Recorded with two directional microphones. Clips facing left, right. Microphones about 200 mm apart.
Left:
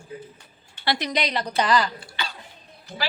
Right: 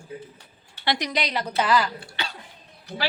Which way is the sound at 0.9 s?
15° right (ahead or behind).